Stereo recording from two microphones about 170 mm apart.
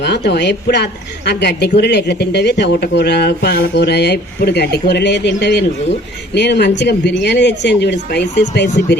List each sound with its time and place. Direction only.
0.0 s a woman's voice: 80° left